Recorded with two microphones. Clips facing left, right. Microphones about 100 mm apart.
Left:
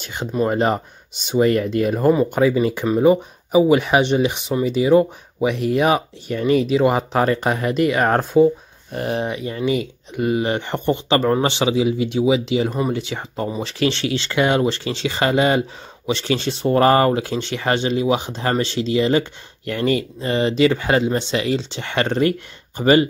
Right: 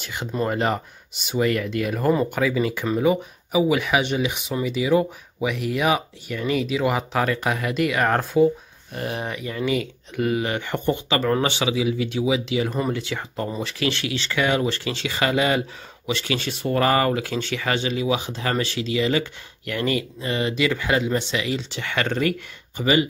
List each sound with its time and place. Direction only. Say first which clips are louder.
0.5 s speech: left 4 dB; 25° left (ahead or behind)
22.8 s speech: left 6 dB; 40° left (ahead or behind)